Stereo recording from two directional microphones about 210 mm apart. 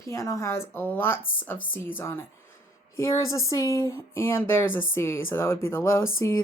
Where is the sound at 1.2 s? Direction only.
70° left (ahead or behind).